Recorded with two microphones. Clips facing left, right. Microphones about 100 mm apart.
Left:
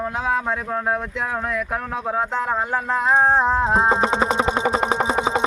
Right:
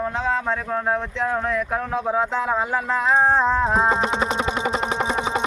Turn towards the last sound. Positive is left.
turn(degrees=30)  # may be behind; listen again after turning